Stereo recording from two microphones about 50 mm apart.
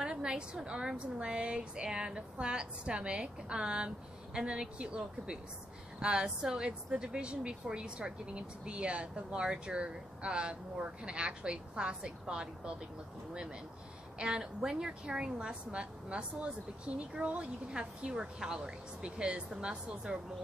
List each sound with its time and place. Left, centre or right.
0.0 s speech: centre
14.1 s speech: centre